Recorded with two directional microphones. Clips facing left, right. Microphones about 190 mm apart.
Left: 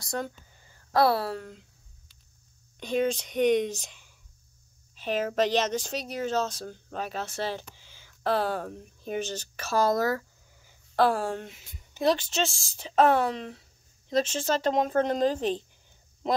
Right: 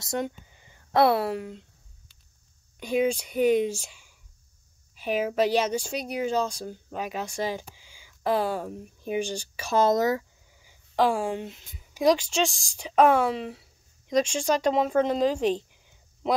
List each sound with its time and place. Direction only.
0.0 s speech: 20° right (ahead or behind)
1.4 s speech: centre (ahead or behind)
2.8 s speech: 10° right (ahead or behind)
10.5 s a sound: 10° right (ahead or behind)
11.4 s speech: centre (ahead or behind)